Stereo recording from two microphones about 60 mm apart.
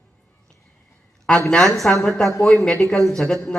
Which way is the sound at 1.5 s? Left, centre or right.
Centre.